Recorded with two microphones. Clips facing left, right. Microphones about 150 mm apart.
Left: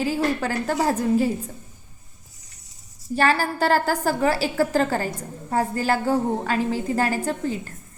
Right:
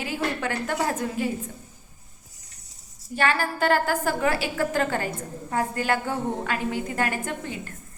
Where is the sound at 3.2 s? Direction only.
35° left (ahead or behind).